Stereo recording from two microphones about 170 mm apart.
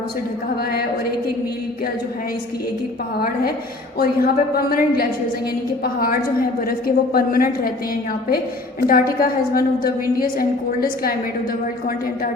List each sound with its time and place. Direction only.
3.9 s a woman's voice: 60° left (ahead or behind)
8.9 s a woman's voice: 60° left (ahead or behind)